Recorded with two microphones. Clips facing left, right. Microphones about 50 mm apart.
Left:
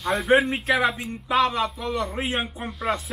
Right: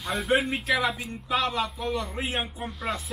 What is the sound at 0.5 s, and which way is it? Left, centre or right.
Speech, left.